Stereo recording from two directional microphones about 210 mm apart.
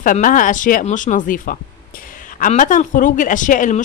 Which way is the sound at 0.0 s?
40° left (ahead or behind).